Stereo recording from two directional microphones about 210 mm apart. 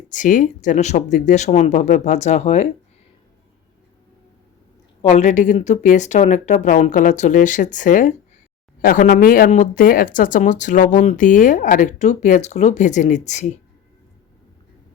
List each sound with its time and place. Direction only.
0.1 s speech: 40° left (ahead or behind)
5.0 s speech: 35° left (ahead or behind)